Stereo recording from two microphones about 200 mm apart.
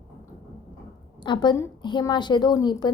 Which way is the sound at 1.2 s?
20° left (ahead or behind).